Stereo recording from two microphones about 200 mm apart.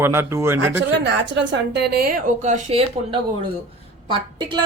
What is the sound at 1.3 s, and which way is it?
Speech, 60° right (ahead or behind).